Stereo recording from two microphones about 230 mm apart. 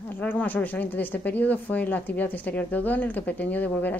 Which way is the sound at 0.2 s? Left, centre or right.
Centre.